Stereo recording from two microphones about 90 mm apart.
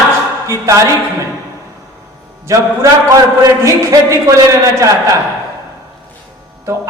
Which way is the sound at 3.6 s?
35° right (ahead or behind).